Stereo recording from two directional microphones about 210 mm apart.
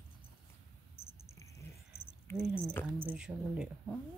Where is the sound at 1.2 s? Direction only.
15° left (ahead or behind).